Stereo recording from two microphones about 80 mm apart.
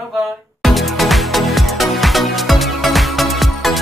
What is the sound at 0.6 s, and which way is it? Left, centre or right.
Music, centre.